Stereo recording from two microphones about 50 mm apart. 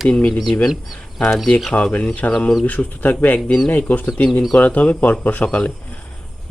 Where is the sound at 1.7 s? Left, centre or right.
Left.